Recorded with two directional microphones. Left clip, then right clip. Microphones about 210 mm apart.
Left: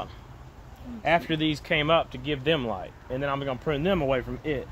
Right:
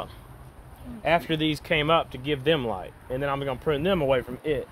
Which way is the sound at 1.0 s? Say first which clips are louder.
Right 1 dB; 50° right (ahead or behind).